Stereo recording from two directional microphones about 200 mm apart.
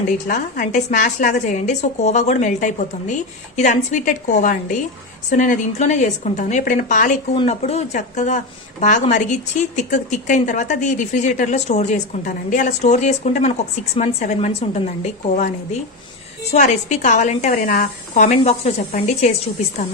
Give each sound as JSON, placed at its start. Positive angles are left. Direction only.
{"t": 0.3, "sound": "speech", "side_deg": 40}
{"t": 16.5, "sound": "speech", "side_deg": 40}